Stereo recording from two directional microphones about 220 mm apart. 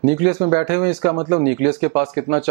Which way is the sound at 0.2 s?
20° right (ahead or behind).